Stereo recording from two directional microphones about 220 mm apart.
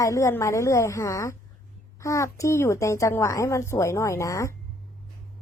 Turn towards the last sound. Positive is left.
turn(degrees=15)  # may be behind; listen again after turning